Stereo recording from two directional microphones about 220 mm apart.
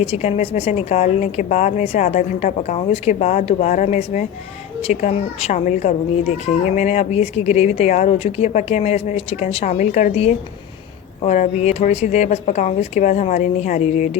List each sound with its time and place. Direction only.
0.0 s a woman's voice: 30° left (ahead or behind)